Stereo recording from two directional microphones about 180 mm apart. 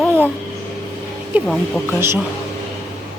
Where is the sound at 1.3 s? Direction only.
10° right (ahead or behind).